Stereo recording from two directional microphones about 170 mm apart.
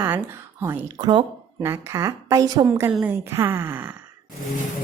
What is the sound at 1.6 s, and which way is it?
A woman's voice, 15° right (ahead or behind).